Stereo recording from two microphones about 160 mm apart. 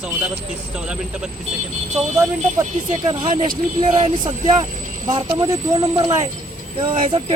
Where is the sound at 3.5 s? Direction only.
35° right (ahead or behind).